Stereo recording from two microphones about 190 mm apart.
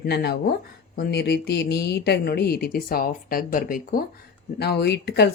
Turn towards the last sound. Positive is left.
turn(degrees=60)  # may be behind; listen again after turning